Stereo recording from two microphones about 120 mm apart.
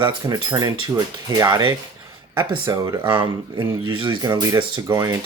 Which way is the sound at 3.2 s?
40° right (ahead or behind).